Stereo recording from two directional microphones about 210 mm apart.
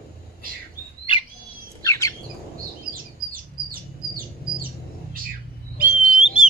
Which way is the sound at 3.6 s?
45° right (ahead or behind).